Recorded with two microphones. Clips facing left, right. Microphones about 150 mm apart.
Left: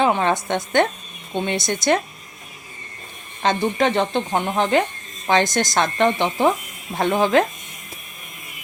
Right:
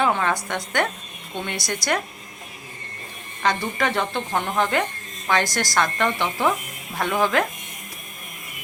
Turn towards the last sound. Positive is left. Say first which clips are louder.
# left 4 dB
turn(degrees=25)  # may be behind; listen again after turning